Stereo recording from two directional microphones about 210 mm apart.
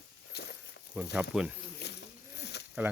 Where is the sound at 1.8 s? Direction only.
50° left (ahead or behind).